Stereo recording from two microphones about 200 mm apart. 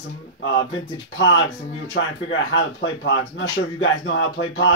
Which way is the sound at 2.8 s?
65° left (ahead or behind).